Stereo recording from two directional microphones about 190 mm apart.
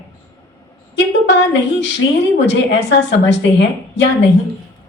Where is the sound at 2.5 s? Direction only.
65° left (ahead or behind).